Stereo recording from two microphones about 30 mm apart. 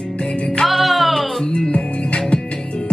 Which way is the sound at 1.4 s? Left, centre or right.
Left.